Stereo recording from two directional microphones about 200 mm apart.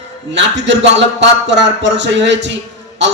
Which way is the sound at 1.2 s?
60° right (ahead or behind).